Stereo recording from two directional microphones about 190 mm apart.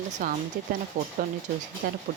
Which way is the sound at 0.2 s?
45° right (ahead or behind).